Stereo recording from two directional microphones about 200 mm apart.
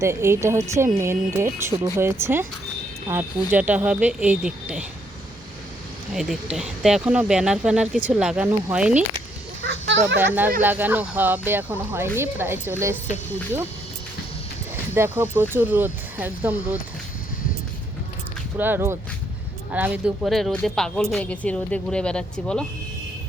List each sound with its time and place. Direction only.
0.0 s speech: 15° right (ahead or behind)
6.1 s speech: centre (ahead or behind)
9.6 s a sound: 65° right (ahead or behind)
10.6 s speech: 10° right (ahead or behind)
14.9 s speech: 10° right (ahead or behind)
18.5 s speech: 10° right (ahead or behind)